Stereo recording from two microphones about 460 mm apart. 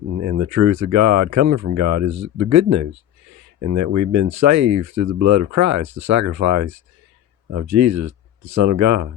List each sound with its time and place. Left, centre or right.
0.3 s speech: right